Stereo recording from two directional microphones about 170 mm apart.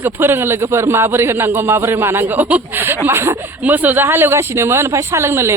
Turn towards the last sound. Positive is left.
turn(degrees=-15)  # may be behind; listen again after turning